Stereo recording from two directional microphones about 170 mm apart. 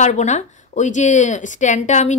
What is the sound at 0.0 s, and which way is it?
Speech, 45° left (ahead or behind).